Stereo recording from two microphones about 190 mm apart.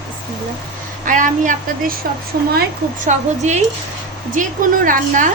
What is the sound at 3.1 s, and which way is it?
A woman's voice, 40° right (ahead or behind).